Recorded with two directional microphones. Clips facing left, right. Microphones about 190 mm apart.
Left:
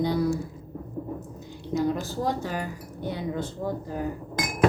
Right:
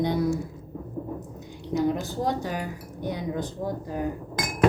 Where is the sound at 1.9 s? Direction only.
20° right (ahead or behind).